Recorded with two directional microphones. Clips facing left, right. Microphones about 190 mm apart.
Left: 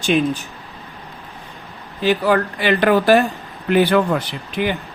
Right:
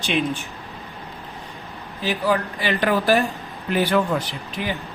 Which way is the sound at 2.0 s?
65° left (ahead or behind).